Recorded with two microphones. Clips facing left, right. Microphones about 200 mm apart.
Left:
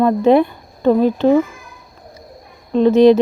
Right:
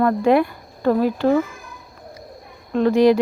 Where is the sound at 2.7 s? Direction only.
20° left (ahead or behind).